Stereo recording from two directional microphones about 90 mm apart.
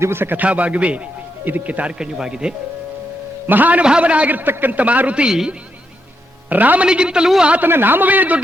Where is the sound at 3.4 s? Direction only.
20° right (ahead or behind).